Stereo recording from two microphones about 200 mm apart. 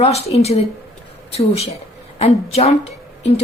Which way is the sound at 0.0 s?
30° left (ahead or behind).